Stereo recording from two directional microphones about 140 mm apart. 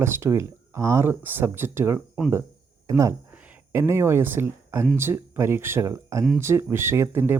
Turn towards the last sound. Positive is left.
turn(degrees=-15)  # may be behind; listen again after turning